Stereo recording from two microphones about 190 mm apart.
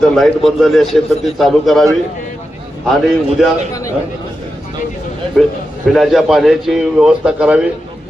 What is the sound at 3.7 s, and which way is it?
Speech, 15° left (ahead or behind).